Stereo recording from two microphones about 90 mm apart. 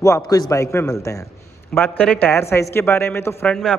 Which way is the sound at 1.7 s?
20° left (ahead or behind).